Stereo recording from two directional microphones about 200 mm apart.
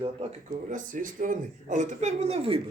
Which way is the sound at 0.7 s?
40° right (ahead or behind).